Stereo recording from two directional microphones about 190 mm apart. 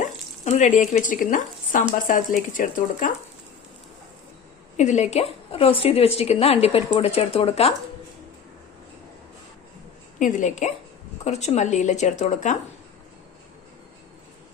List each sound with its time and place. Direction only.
0.0 s speech: 40° left (ahead or behind)
4.8 s speech: 35° left (ahead or behind)
10.2 s speech: 40° left (ahead or behind)